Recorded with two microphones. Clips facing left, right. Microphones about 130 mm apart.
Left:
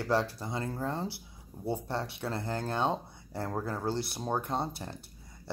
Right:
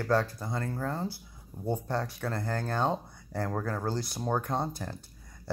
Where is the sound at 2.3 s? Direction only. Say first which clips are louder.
Left 1 dB; 10° left (ahead or behind).